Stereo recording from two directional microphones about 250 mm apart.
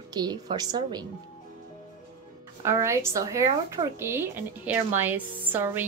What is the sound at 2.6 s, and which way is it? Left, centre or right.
A woman's voice, centre.